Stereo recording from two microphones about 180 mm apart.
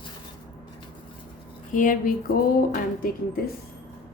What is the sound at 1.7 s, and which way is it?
Speech, 50° left (ahead or behind).